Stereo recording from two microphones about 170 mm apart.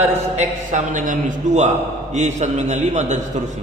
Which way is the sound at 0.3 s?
50° right (ahead or behind).